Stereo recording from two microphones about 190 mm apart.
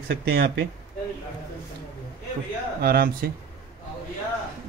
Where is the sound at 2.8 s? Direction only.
50° right (ahead or behind).